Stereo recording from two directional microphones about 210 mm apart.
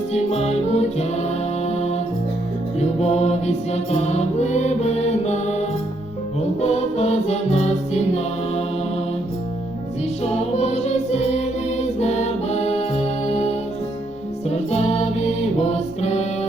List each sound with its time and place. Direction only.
0.1 s music: 30° left (ahead or behind)
3.0 s music: 30° left (ahead or behind)
10.6 s music: 30° left (ahead or behind)